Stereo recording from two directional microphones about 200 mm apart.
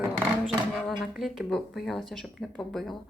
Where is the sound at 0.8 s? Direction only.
Centre (ahead or behind).